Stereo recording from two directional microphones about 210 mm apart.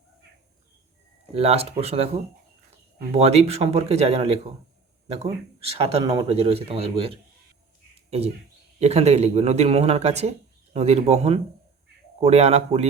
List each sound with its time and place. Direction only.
1.3 s speech: 30° right (ahead or behind)
3.1 s speech: 30° right (ahead or behind)
5.7 s speech: 25° right (ahead or behind)
8.8 s speech: 30° right (ahead or behind)